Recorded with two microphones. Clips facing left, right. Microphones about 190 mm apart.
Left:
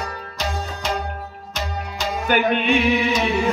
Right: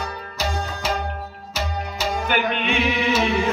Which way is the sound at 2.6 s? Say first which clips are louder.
Left 4 dB; centre (ahead or behind).